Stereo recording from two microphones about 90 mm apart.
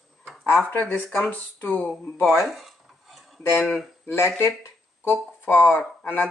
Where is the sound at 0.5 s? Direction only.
20° left (ahead or behind).